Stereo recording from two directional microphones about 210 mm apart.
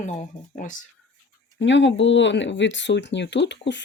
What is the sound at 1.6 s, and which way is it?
Speech, 60° left (ahead or behind).